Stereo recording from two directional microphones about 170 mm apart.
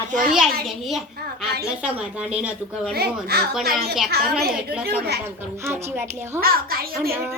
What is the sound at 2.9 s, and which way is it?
Speech, 70° right (ahead or behind).